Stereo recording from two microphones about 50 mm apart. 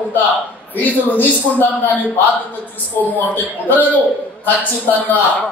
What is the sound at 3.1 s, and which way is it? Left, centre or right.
A man's voice, left.